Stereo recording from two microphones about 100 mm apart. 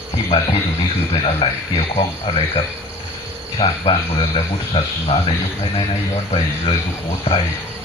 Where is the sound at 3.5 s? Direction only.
70° left (ahead or behind).